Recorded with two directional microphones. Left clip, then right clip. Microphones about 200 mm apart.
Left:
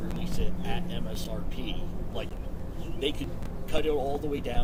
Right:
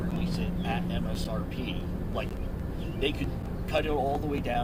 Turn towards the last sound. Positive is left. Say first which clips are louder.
# even
turn(degrees=-30)  # may be behind; listen again after turning